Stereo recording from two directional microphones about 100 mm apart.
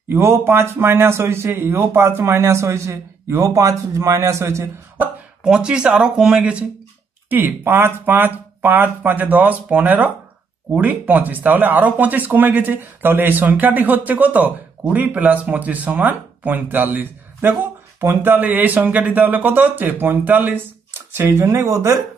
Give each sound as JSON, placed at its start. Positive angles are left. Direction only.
{"t": 0.1, "sound": "a man's voice", "side_deg": -25}
{"t": 7.2, "sound": "a man's voice", "side_deg": -20}